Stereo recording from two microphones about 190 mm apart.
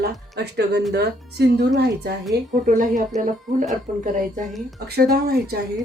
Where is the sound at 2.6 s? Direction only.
45° right (ahead or behind).